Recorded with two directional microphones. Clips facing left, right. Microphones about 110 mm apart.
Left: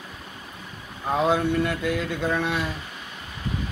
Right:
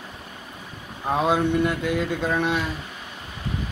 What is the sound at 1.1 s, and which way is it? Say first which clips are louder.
Speech: right 1 dB; 20° right (ahead or behind).